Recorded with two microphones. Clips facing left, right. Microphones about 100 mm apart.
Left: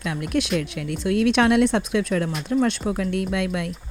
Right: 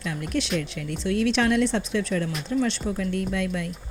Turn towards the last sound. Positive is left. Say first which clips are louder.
# left 3 dB
turn(degrees=60)  # may be behind; listen again after turning